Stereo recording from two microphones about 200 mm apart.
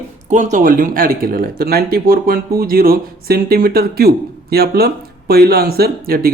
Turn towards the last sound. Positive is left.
turn(degrees=-45)  # may be behind; listen again after turning